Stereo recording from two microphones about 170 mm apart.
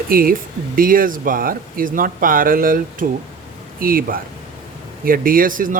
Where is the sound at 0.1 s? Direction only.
60° right (ahead or behind).